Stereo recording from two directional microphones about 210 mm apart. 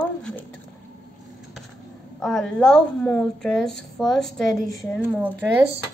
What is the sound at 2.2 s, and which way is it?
A woman's voice, 5° left (ahead or behind).